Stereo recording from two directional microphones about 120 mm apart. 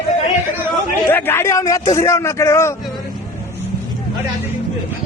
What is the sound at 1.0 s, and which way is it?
A man's voice, 20° left (ahead or behind).